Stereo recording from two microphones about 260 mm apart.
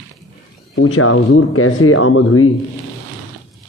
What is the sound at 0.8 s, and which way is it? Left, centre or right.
A man's voice, left.